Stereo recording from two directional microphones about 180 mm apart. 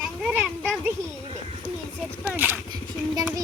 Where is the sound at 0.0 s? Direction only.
5° right (ahead or behind).